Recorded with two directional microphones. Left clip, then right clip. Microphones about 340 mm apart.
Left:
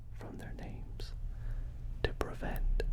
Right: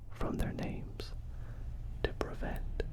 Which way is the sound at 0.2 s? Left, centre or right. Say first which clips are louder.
Right 10 dB; right.